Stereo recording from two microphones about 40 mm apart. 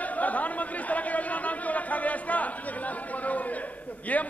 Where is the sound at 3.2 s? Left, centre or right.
Left.